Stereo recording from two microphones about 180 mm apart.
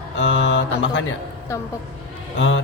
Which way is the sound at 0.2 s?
90° left.